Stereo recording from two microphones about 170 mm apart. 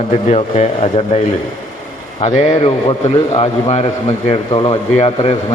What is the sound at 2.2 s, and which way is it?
Speech, 40° left (ahead or behind).